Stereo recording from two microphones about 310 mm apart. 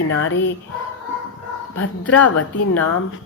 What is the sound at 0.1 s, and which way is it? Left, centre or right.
Speech, left.